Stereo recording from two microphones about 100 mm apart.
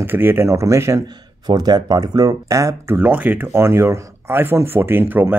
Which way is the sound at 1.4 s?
45° right (ahead or behind).